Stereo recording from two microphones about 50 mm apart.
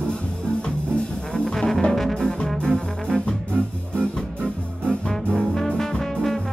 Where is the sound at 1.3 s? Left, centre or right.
Centre.